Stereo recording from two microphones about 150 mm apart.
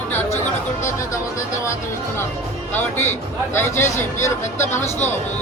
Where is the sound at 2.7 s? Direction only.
15° left (ahead or behind).